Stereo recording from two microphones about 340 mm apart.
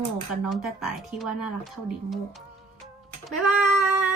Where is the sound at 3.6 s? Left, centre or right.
Left.